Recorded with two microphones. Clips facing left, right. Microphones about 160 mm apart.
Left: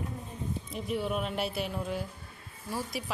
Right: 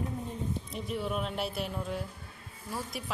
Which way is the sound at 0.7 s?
Centre (ahead or behind).